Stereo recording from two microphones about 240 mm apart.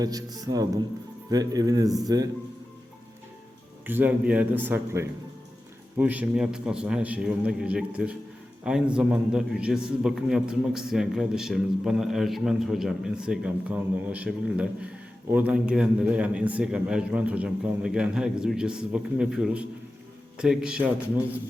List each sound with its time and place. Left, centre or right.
0.0 s speech: centre
3.8 s a man's voice: centre